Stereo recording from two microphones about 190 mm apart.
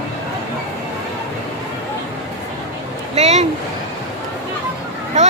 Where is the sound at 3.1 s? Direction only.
35° right (ahead or behind).